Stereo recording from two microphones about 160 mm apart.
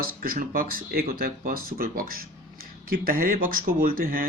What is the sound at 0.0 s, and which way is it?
Speech, 65° right (ahead or behind).